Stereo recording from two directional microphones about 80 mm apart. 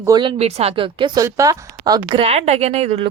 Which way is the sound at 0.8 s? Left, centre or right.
Right.